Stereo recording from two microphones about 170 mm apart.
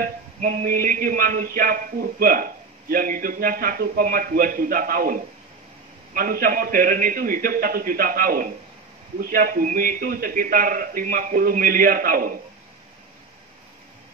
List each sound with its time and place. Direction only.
0.0 s a man's voice: 55° right (ahead or behind)